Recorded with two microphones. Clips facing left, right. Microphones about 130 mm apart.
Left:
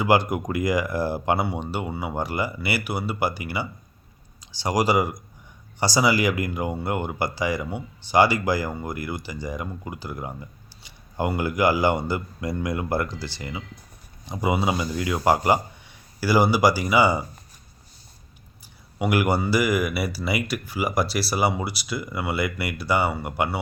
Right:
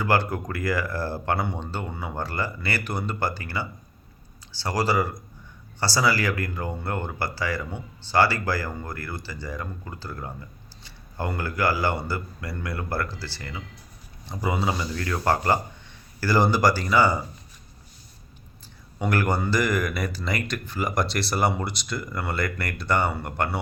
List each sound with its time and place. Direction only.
0.0 s speech: 15° left (ahead or behind)
18.9 s speech: 10° left (ahead or behind)